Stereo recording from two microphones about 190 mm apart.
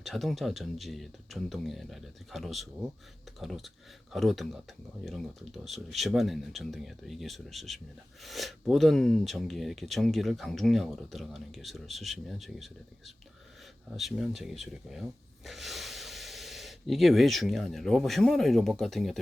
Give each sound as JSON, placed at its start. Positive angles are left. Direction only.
{"t": 0.0, "sound": "speech", "side_deg": 0}